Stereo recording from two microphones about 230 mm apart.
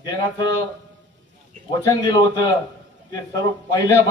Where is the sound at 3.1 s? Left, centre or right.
Centre.